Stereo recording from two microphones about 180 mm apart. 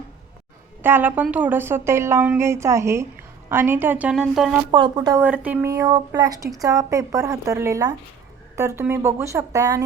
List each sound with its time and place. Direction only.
0.8 s a woman's voice: 10° right (ahead or behind)
4.7 s speech: 25° right (ahead or behind)
5.2 s a woman's voice: 10° right (ahead or behind)